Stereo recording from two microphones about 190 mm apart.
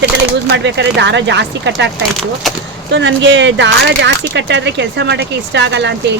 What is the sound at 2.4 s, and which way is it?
Speech, centre (ahead or behind).